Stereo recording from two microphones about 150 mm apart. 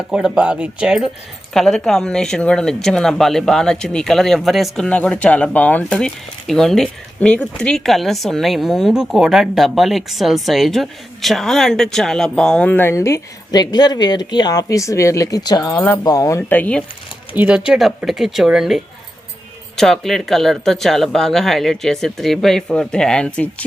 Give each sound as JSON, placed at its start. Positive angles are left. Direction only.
{"t": 0.1, "sound": "speech", "side_deg": -5}
{"t": 16.5, "sound": "speech", "side_deg": 10}
{"t": 17.3, "sound": "speech", "side_deg": -10}